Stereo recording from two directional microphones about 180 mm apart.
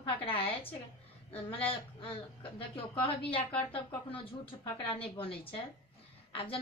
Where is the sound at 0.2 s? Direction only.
30° left (ahead or behind).